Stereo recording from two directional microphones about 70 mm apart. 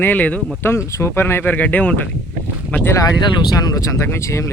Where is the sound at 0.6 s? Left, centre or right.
Left.